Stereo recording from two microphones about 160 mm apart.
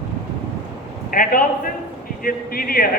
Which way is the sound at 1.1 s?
60° left (ahead or behind).